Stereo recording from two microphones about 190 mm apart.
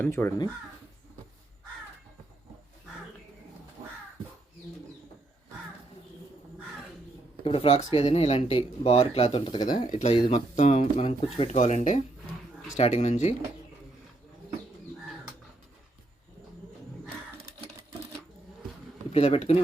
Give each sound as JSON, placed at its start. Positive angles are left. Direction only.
{"t": 0.0, "sound": "speech", "side_deg": 10}
{"t": 7.4, "sound": "speech", "side_deg": 30}
{"t": 19.1, "sound": "speech", "side_deg": 35}